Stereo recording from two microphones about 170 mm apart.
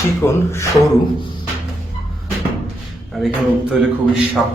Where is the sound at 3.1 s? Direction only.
Centre (ahead or behind).